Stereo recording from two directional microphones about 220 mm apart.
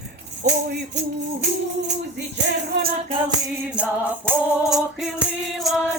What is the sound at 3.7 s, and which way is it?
Music, 5° right (ahead or behind).